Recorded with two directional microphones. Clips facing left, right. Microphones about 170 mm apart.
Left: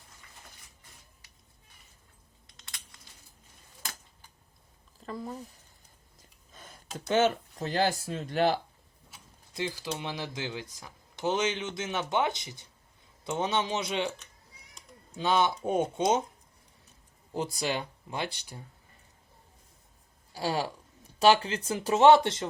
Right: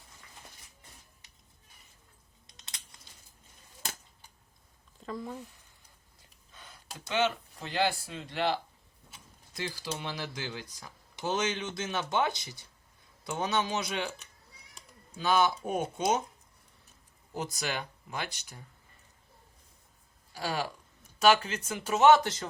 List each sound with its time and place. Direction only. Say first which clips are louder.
2.5 s typing: left 1 dB; 20° right (ahead or behind)
4.9 s speech: even; 5° left (ahead or behind)
6.5 s speech: left 6 dB; 45° left (ahead or behind)
9.6 s speech: left 3 dB; 20° left (ahead or behind)
15.2 s speech: even; 25° left (ahead or behind)
17.3 s speech: left 4 dB; 30° left (ahead or behind)
20.3 s speech: left 3 dB; 30° left (ahead or behind)